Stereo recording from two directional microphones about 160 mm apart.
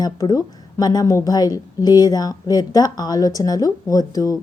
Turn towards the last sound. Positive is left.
turn(degrees=20)  # may be behind; listen again after turning